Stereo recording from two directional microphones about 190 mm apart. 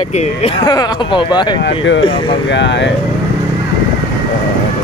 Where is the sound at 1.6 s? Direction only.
75° left (ahead or behind).